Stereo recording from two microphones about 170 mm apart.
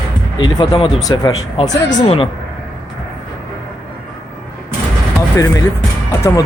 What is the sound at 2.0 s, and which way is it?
Speech, 30° left (ahead or behind).